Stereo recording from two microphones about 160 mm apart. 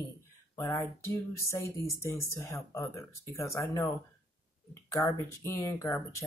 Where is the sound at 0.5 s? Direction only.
15° left (ahead or behind).